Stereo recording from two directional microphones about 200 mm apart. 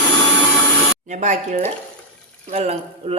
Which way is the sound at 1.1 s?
35° right (ahead or behind).